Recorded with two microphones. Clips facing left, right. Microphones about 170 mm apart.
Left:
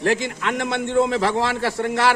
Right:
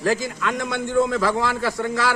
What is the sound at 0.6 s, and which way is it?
Speech, 65° left (ahead or behind).